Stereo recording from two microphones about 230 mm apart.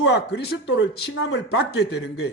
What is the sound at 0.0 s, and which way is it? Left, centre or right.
A man's voice, left.